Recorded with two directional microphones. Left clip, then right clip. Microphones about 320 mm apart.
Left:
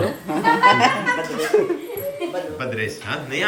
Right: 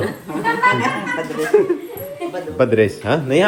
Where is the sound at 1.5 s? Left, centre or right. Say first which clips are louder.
Right 4 dB; centre.